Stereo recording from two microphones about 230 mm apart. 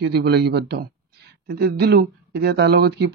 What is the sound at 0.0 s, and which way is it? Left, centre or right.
Speech, right.